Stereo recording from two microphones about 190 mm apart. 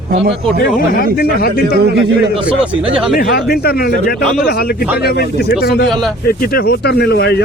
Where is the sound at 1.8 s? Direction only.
60° right (ahead or behind).